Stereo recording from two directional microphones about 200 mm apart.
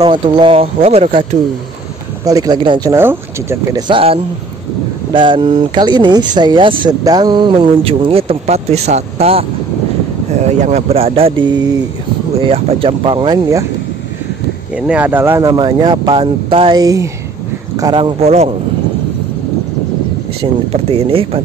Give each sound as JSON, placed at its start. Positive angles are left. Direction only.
{"t": 0.0, "sound": "speech", "side_deg": -25}
{"t": 2.2, "sound": "speech", "side_deg": -20}
{"t": 10.6, "sound": "speech", "side_deg": -35}
{"t": 14.8, "sound": "speech", "side_deg": -5}
{"t": 20.7, "sound": "speech", "side_deg": -30}